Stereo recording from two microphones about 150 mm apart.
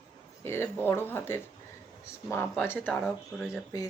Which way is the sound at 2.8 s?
Centre (ahead or behind).